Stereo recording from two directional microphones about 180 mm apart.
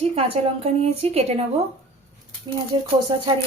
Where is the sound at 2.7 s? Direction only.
25° right (ahead or behind).